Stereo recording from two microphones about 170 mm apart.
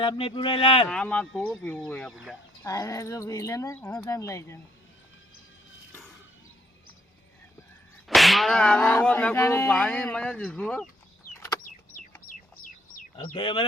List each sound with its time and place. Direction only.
0.0 s speech: 30° left (ahead or behind)
0.9 s speech: 5° left (ahead or behind)
2.6 s speech: 20° left (ahead or behind)
8.0 s speech: centre (ahead or behind)
12.3 s bird: 60° left (ahead or behind)
13.4 s speech: 30° left (ahead or behind)